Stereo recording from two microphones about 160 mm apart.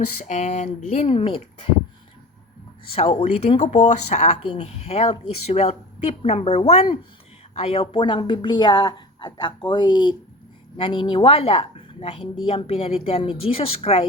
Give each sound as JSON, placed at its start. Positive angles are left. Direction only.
{"t": 0.2, "sound": "speech", "side_deg": 45}
{"t": 2.9, "sound": "a woman's voice", "side_deg": 40}